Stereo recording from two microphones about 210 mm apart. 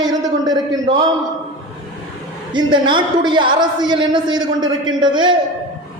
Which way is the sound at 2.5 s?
20° right (ahead or behind).